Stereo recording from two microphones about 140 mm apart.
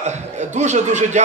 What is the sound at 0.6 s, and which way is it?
Speech, 55° right (ahead or behind).